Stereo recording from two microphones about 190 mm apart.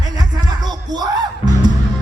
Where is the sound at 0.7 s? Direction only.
20° right (ahead or behind).